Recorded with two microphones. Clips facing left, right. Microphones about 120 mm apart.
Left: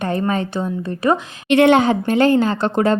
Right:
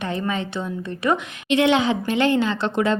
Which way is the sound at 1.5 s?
55° left (ahead or behind).